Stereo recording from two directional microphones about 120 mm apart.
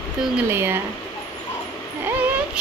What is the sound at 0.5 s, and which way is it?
Speech, 20° right (ahead or behind).